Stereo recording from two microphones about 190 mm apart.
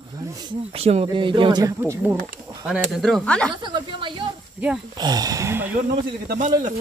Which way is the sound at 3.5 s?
25° right (ahead or behind).